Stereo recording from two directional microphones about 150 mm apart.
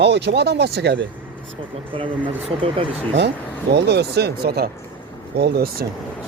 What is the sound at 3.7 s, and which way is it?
Speech, 90° right.